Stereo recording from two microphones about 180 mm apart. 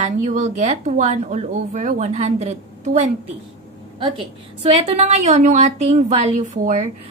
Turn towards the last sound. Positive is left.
turn(degrees=-40)  # may be behind; listen again after turning